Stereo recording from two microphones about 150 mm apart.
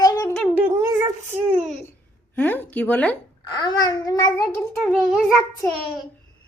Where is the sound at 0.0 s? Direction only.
25° left (ahead or behind).